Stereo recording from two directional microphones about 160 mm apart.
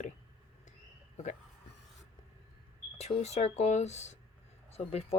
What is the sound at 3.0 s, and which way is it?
Speech, 45° left (ahead or behind).